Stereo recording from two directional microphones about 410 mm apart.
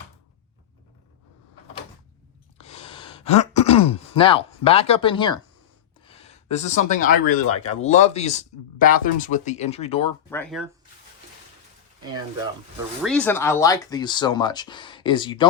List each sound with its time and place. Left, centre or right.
2.6 s gasp: centre
6.1 s speech: centre
10.2 s speech: centre
13.0 s speech: centre